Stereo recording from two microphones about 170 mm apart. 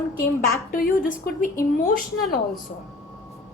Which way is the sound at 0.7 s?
55° left (ahead or behind).